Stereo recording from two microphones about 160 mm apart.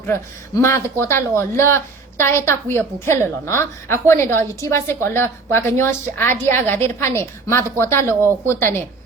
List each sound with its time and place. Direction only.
0.0 s a woman's voice: 15° left (ahead or behind)